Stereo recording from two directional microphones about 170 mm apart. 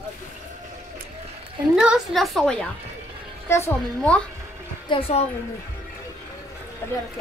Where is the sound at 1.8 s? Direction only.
Centre (ahead or behind).